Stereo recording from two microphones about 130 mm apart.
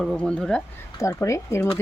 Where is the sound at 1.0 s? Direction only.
25° left (ahead or behind).